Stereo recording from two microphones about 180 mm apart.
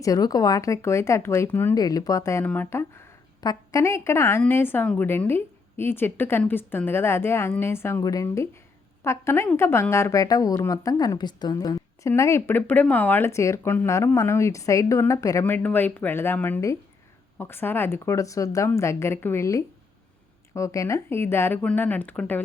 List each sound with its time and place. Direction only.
0.0 s a woman's voice: 20° left (ahead or behind)